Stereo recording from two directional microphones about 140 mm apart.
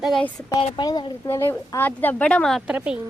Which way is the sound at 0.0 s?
Centre (ahead or behind).